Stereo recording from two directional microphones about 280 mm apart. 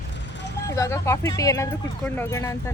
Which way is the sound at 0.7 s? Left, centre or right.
Centre.